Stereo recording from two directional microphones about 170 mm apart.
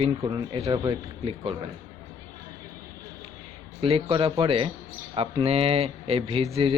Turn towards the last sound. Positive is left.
turn(degrees=-35)  # may be behind; listen again after turning